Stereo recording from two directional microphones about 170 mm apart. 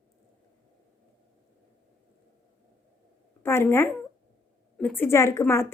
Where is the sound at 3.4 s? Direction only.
15° left (ahead or behind).